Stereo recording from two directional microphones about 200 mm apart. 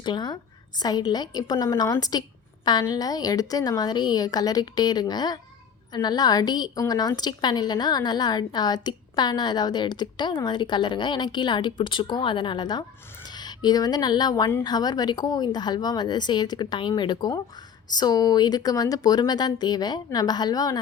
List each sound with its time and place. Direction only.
0.0 s a woman's voice: 20° left (ahead or behind)